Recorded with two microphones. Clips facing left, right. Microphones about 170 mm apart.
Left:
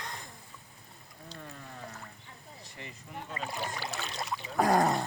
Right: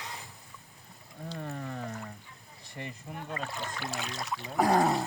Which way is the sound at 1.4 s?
60° right (ahead or behind).